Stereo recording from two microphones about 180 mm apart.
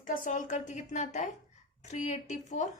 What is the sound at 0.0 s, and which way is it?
A woman's voice, 45° left (ahead or behind).